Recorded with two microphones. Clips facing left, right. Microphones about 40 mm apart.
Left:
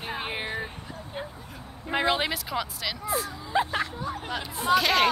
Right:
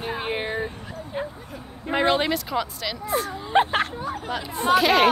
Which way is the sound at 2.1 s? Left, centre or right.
Centre.